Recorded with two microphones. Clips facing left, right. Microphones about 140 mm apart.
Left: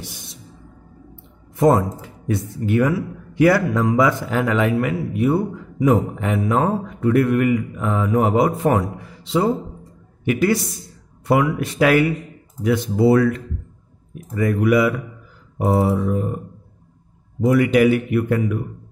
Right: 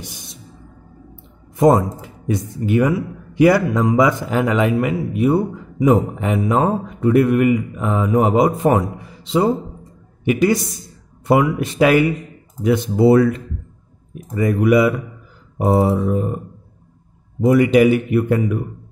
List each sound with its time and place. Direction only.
1.1 s speech: 15° right (ahead or behind)
17.4 s speech: 20° right (ahead or behind)